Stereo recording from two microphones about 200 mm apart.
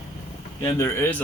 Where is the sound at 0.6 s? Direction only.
15° left (ahead or behind).